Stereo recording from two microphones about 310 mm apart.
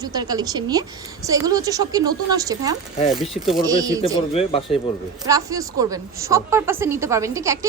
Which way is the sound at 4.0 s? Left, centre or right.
Centre.